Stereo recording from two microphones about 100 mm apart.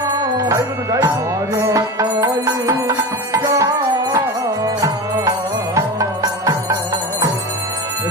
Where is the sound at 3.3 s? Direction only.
30° right (ahead or behind).